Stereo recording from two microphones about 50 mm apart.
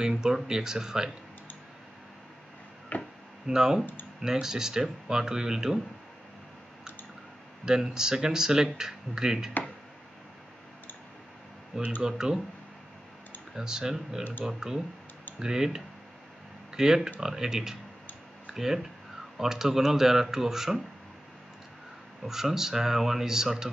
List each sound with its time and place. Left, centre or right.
0.0 s speech: centre
2.9 s a sound: left
3.4 s speech: centre
7.6 s speech: centre
12.0 s speech: centre
13.6 s speech: centre
22.2 s speech: centre